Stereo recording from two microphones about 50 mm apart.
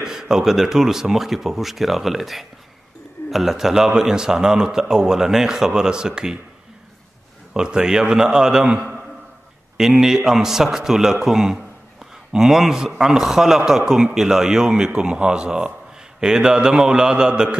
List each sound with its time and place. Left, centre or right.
0.0 s a man's voice: centre
7.5 s a man's voice: centre